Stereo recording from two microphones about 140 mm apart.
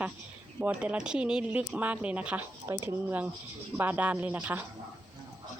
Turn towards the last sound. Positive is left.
turn(degrees=-10)  # may be behind; listen again after turning